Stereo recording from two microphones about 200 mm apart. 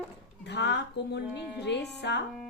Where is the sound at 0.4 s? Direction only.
60° left (ahead or behind).